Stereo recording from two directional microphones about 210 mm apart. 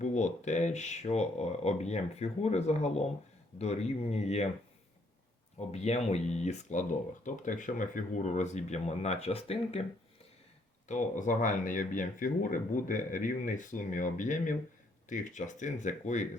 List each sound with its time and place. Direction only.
0.0 s speech: 35° left (ahead or behind)
5.5 s speech: 30° left (ahead or behind)
10.8 s speech: 35° left (ahead or behind)